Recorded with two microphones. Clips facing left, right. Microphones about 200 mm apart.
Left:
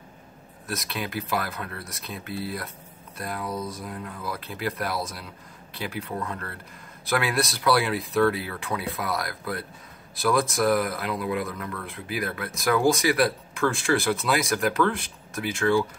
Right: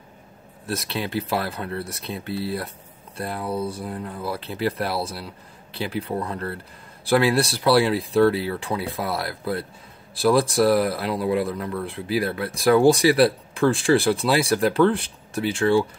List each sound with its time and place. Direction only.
0.7 s speech: 30° right (ahead or behind)